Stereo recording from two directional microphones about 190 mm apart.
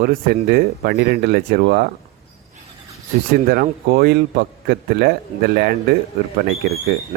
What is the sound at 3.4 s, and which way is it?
A man's voice, 50° right (ahead or behind).